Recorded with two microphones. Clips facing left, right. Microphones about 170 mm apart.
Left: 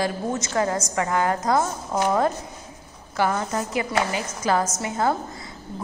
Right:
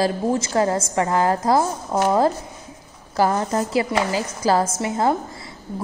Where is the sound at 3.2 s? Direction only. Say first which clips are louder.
Right 4 dB; 35° right (ahead or behind).